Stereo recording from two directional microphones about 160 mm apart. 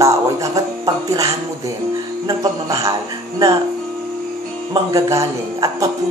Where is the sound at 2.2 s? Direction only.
20° right (ahead or behind).